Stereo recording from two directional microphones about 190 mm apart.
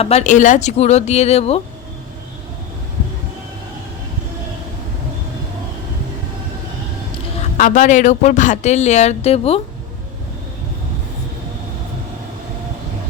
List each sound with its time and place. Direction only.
0.0 s speech: 35° left (ahead or behind)
7.6 s speech: 40° left (ahead or behind)